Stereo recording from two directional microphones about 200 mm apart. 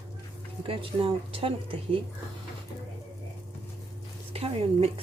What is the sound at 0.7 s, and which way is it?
A woman's voice, 25° right (ahead or behind).